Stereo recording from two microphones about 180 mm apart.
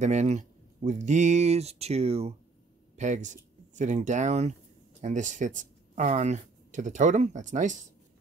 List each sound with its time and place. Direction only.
0.0 s speech: 40° right (ahead or behind)